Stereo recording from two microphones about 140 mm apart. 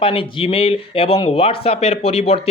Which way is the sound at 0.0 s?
40° left (ahead or behind).